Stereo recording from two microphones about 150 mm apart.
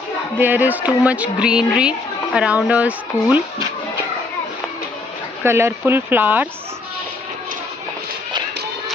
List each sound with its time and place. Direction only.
0.3 s speech: 10° right (ahead or behind)
5.4 s speech: 15° right (ahead or behind)